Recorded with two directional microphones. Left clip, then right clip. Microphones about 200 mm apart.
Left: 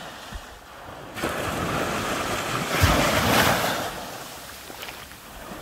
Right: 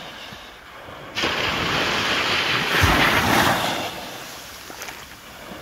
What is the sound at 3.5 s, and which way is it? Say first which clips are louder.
Vehicle: right 1 dB; 15° left (ahead or behind).